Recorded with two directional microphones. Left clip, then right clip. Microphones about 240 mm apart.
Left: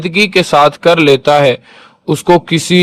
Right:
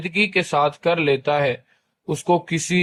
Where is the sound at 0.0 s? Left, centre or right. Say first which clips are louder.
Left 9 dB; left.